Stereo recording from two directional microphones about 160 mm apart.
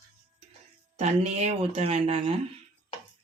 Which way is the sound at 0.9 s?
45° right (ahead or behind).